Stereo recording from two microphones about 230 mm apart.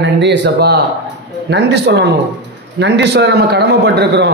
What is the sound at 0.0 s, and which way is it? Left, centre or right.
A man's voice, right.